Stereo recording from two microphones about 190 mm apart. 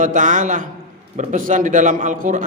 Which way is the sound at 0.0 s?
45° right (ahead or behind).